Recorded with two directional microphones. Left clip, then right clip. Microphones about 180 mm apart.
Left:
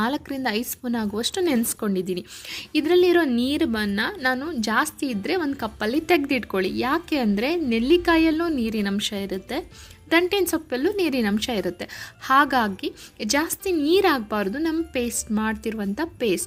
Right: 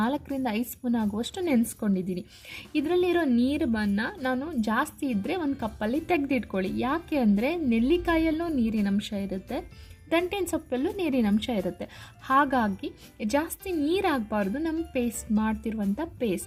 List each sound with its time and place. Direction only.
0.0 s a woman's voice: 5° left (ahead or behind)